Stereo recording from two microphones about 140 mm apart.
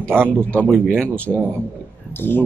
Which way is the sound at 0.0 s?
15° right (ahead or behind).